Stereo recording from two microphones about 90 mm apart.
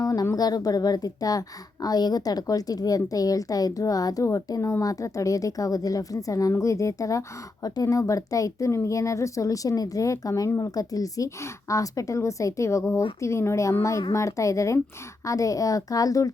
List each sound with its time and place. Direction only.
0.0 s a woman's voice: 40° left (ahead or behind)